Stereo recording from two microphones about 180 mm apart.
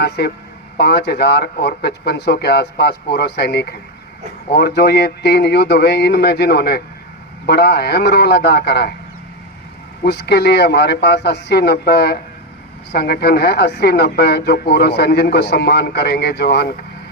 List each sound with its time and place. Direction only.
0.2 s a woman's voice: 65° left (ahead or behind)
10.0 s a woman's voice: 65° left (ahead or behind)